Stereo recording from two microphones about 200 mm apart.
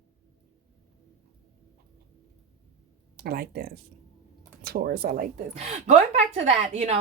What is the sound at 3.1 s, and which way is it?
A woman's voice, 50° right (ahead or behind).